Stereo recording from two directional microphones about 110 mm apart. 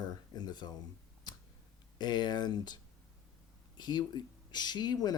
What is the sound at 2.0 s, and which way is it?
Speech, 40° left (ahead or behind).